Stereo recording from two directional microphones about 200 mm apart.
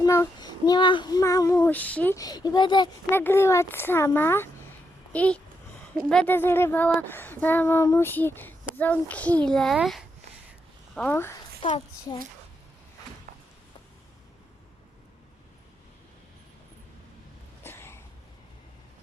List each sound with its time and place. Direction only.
0.0 s child singing: 15° left (ahead or behind)
3.1 s speech: 10° left (ahead or behind)
11.6 s child singing: 25° left (ahead or behind)
17.6 s a sound: 10° left (ahead or behind)